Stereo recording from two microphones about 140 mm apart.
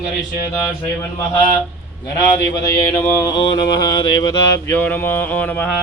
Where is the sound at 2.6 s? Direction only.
20° left (ahead or behind).